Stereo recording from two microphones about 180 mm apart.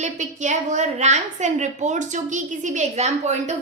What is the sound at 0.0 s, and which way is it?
A woman's voice, 40° right (ahead or behind).